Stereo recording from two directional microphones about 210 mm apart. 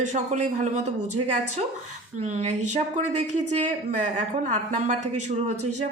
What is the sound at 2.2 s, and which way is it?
Speech, 30° right (ahead or behind).